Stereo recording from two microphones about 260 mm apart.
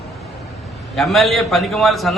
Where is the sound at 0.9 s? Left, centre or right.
Centre.